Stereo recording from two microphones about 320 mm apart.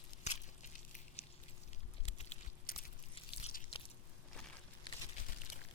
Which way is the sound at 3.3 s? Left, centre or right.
Centre.